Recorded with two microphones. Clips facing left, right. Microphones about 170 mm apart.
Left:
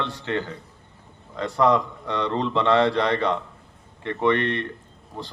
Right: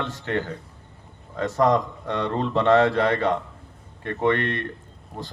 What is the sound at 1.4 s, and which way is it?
A man's voice, 45° right (ahead or behind).